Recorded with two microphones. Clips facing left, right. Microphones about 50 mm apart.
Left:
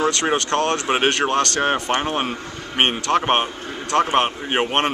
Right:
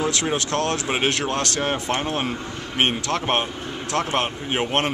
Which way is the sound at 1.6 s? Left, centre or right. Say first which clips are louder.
Left 4 dB; left.